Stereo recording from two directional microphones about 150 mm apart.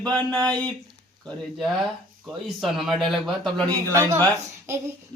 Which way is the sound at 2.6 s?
Centre (ahead or behind).